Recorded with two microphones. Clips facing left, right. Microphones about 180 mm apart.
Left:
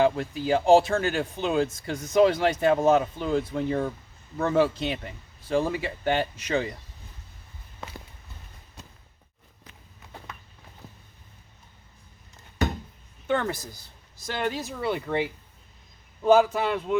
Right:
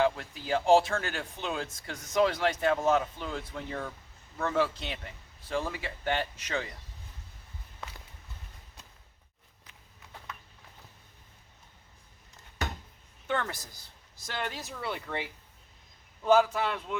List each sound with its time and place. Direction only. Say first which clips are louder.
0.0 s speech: left 5 dB; 10° left (ahead or behind)
13.2 s speech: left 6 dB; 5° left (ahead or behind)